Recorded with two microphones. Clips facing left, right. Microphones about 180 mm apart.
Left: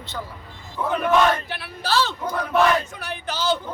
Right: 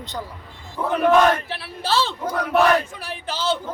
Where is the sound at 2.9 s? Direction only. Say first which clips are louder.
Even; 30° right (ahead or behind).